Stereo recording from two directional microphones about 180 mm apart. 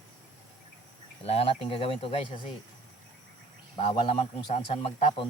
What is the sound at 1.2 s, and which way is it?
Speech, 35° left (ahead or behind).